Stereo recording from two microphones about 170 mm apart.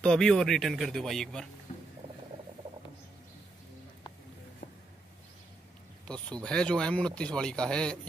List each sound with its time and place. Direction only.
0.0 s speech: 5° left (ahead or behind)
4.6 s a sound: 55° left (ahead or behind)
6.0 s speech: 5° left (ahead or behind)